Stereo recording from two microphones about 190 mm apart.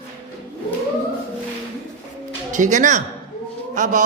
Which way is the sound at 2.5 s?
40° right (ahead or behind).